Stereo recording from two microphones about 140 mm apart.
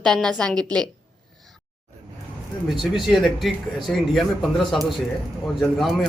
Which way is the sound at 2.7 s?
Centre (ahead or behind).